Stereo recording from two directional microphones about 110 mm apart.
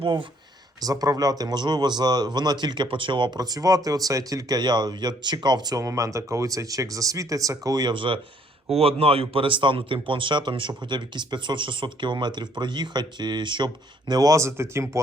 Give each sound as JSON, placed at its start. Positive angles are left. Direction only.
{"t": 0.0, "sound": "speech", "side_deg": -50}
{"t": 0.9, "sound": "speech", "side_deg": -35}
{"t": 14.1, "sound": "speech", "side_deg": -35}